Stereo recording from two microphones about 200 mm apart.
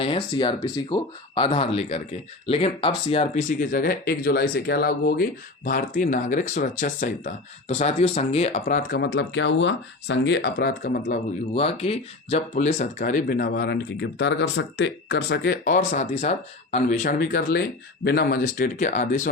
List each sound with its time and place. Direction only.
0.0 s speech: 25° left (ahead or behind); by 9.0 s 45° left (ahead or behind)
9.0 s speech: 60° left (ahead or behind)
11.5 s speech: 30° left (ahead or behind)